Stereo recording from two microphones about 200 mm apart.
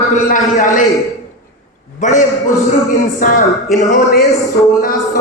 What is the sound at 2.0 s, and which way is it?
Speech, 40° left (ahead or behind).